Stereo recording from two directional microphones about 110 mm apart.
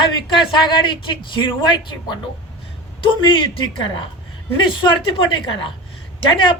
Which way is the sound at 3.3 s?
45° left (ahead or behind).